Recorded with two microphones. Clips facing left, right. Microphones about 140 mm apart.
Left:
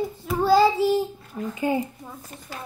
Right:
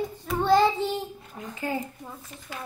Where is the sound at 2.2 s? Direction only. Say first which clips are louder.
Left 2 dB; 35° left (ahead or behind).